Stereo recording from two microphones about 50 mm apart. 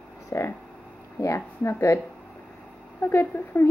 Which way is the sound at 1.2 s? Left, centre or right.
Left.